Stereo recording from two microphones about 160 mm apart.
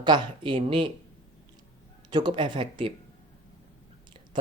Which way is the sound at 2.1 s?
30° right (ahead or behind).